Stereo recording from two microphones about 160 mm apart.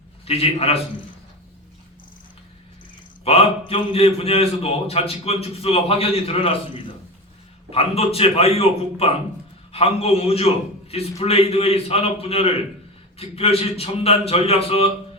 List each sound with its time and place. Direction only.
0.3 s a man's voice: 40° left (ahead or behind)
3.2 s a man's voice: 35° left (ahead or behind)